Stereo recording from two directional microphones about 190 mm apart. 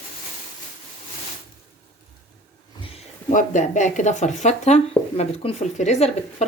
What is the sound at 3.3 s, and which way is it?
Speech, 40° left (ahead or behind).